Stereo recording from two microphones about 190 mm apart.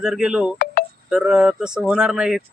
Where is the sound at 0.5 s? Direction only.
55° left (ahead or behind).